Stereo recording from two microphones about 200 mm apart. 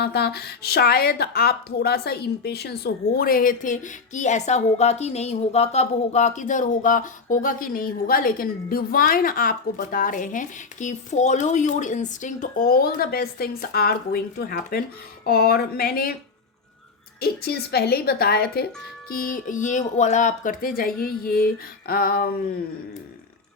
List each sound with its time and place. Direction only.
0.0 s a woman's voice: 55° left (ahead or behind)
17.2 s a woman's voice: 50° left (ahead or behind)